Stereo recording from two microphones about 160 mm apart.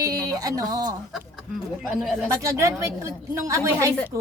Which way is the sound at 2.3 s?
20° right (ahead or behind).